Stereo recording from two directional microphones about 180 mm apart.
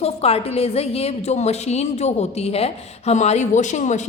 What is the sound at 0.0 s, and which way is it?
A woman's voice, 35° left (ahead or behind).